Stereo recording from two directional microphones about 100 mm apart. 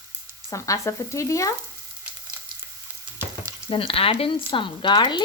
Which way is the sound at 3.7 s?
70° left (ahead or behind).